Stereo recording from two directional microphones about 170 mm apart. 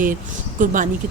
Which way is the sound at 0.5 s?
50° right (ahead or behind).